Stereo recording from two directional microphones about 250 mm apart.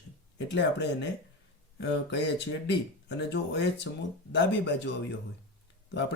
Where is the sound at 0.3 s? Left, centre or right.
Left.